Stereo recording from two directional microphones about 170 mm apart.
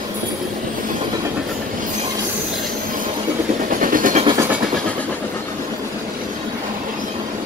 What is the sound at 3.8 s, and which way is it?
Vehicle, 50° right (ahead or behind).